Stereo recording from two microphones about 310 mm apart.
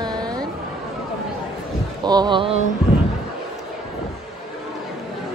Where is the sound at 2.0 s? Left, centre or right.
Centre.